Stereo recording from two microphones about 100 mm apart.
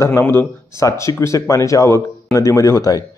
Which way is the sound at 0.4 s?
30° left (ahead or behind).